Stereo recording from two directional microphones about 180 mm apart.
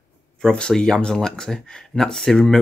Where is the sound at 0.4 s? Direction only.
5° left (ahead or behind).